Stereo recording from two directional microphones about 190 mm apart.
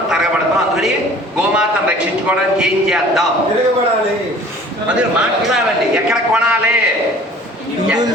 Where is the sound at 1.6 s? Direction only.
5° right (ahead or behind).